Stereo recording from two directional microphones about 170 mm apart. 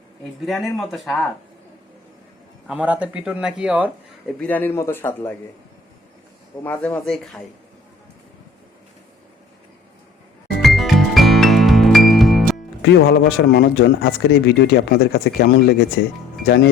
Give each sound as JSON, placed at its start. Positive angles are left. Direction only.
{"t": 0.4, "sound": "speech", "side_deg": 0}
{"t": 2.6, "sound": "speech", "side_deg": -10}
{"t": 4.3, "sound": "speech", "side_deg": 5}
{"t": 6.6, "sound": "speech", "side_deg": 10}
{"t": 10.6, "sound": "music", "side_deg": 0}
{"t": 12.8, "sound": "speech", "side_deg": 75}
{"t": 16.0, "sound": "speech", "side_deg": 90}